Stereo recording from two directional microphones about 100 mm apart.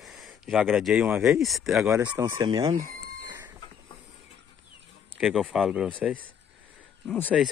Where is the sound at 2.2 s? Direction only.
35° right (ahead or behind).